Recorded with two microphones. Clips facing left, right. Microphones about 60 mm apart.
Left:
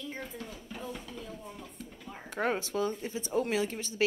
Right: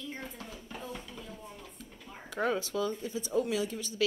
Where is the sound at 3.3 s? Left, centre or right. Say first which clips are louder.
Left 1 dB; left.